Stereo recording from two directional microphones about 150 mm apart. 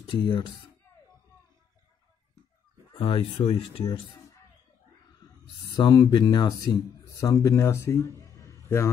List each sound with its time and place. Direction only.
0.1 s speech: 30° left (ahead or behind)
2.9 s speech: 35° left (ahead or behind)
5.2 s a sound: 25° left (ahead or behind)
5.8 s a man's voice: 25° left (ahead or behind)